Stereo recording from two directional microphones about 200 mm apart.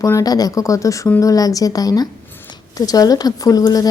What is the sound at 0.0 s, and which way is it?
Speech, 15° left (ahead or behind).